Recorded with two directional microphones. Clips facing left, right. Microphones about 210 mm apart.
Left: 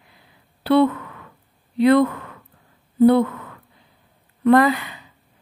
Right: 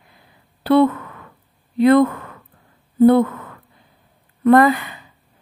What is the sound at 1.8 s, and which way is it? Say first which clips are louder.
Speech: right 2 dB; 50° right (ahead or behind).